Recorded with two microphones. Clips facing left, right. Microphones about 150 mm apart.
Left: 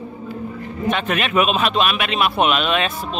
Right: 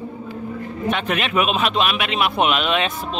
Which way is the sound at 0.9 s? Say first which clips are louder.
Left 2 dB; 15° right (ahead or behind).